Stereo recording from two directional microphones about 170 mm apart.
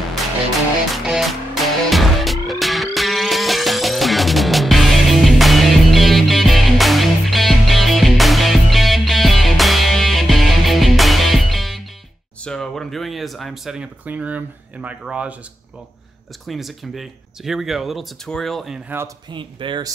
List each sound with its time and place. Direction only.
0.9 s music: centre (ahead or behind)
12.4 s speech: centre (ahead or behind)
16.4 s speech: centre (ahead or behind)
19.3 s speech: 30° right (ahead or behind)